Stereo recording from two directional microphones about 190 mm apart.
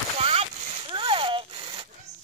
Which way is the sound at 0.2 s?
30° right (ahead or behind).